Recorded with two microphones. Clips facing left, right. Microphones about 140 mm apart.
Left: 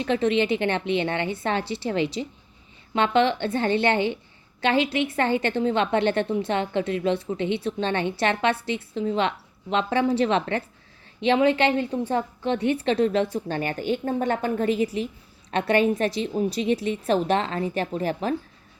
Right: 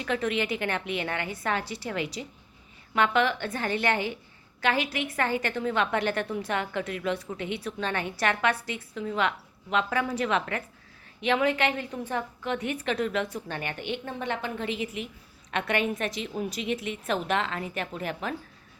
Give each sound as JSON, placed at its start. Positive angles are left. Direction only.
{"t": 0.0, "sound": "a woman's voice", "side_deg": 25}